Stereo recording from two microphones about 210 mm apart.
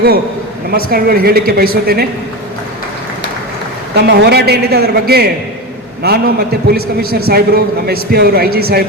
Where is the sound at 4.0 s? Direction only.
50° right (ahead or behind).